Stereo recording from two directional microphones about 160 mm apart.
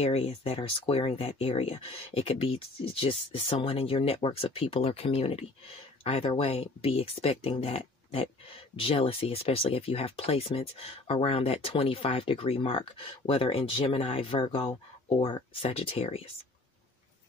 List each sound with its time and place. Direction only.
0.0 s speech: 40° left (ahead or behind)